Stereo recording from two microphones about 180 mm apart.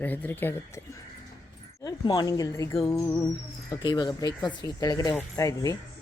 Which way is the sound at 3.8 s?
25° left (ahead or behind).